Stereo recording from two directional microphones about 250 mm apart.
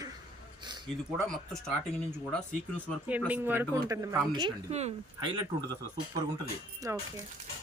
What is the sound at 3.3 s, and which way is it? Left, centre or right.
Speech, centre.